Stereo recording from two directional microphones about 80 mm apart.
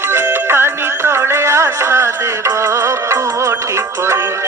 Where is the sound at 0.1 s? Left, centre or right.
Right.